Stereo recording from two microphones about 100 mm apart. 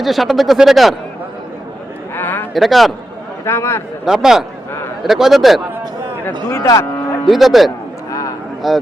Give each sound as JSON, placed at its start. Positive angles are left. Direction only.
{"t": 0.0, "sound": "speech", "side_deg": 0}
{"t": 2.1, "sound": "a sound", "side_deg": 20}
{"t": 2.5, "sound": "speech", "side_deg": 0}
{"t": 3.4, "sound": "a man's voice", "side_deg": 25}
{"t": 4.0, "sound": "speech", "side_deg": -5}
{"t": 6.5, "sound": "a man's voice", "side_deg": 30}
{"t": 7.3, "sound": "speech", "side_deg": 0}